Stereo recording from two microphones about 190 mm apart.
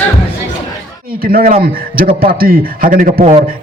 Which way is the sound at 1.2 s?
50° right (ahead or behind).